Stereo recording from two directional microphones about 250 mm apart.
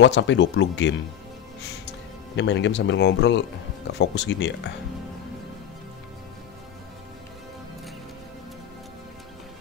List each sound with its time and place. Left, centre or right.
0.0 s speech: left